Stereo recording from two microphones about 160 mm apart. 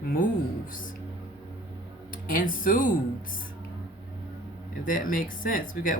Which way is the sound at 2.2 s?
60° left (ahead or behind).